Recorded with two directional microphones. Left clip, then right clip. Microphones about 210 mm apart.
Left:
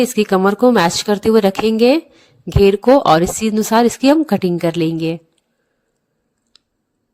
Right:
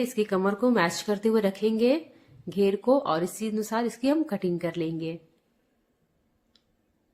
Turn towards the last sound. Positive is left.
turn(degrees=45)  # may be behind; listen again after turning